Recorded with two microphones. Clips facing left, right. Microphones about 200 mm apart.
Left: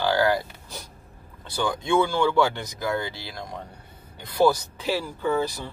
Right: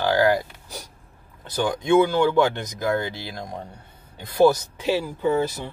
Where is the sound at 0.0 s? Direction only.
15° right (ahead or behind).